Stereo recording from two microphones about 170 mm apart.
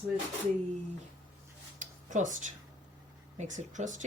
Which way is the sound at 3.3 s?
45° right (ahead or behind).